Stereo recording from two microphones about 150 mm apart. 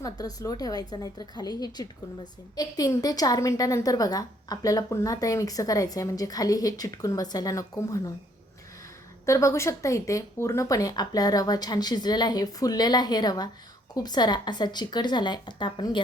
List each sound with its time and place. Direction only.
0.0 s a woman's voice: 25° left (ahead or behind)
9.2 s a woman's voice: 20° left (ahead or behind)